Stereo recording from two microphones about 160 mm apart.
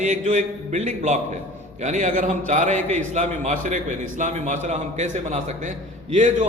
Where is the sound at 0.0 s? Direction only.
50° right (ahead or behind).